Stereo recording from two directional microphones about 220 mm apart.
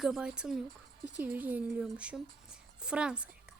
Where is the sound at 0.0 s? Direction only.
Centre (ahead or behind).